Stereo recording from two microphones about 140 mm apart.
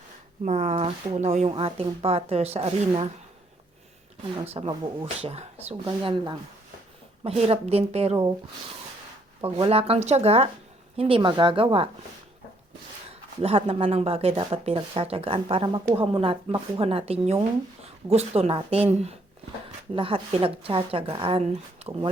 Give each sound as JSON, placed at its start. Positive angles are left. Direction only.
{"t": 0.4, "sound": "speech", "side_deg": -55}
{"t": 1.5, "sound": "speech", "side_deg": -45}
{"t": 4.4, "sound": "speech", "side_deg": -45}
{"t": 9.4, "sound": "speech", "side_deg": -45}
{"t": 13.1, "sound": "speech", "side_deg": -45}